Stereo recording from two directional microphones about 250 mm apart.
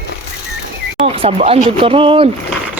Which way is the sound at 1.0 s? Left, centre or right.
Right.